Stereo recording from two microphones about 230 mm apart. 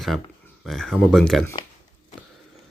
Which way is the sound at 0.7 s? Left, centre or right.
Centre.